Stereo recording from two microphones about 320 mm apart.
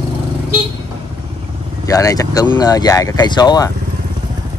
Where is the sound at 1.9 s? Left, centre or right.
Centre.